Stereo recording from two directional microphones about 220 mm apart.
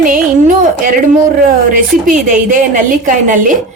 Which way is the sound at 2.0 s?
35° right (ahead or behind).